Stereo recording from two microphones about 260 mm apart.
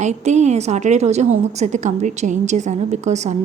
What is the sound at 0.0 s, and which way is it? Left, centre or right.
A woman's voice, right.